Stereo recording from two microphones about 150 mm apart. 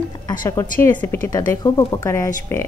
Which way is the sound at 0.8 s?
15° left (ahead or behind).